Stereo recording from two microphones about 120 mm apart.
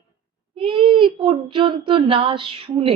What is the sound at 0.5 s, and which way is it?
Speech, 50° right (ahead or behind).